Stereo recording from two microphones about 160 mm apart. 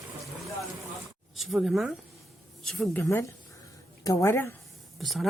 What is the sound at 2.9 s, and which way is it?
A woman's voice, 15° left (ahead or behind).